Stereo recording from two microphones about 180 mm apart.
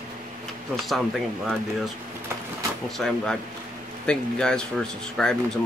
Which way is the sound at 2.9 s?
5° left (ahead or behind).